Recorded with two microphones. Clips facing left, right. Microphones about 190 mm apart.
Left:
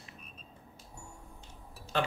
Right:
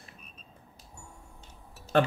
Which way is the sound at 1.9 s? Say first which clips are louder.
Right 8 dB; 55° right (ahead or behind).